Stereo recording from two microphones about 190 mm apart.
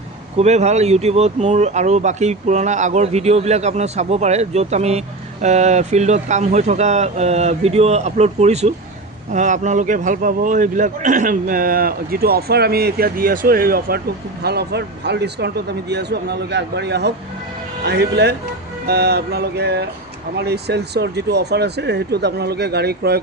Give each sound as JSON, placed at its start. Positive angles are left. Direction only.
{"t": 0.3, "sound": "a man's voice", "side_deg": -35}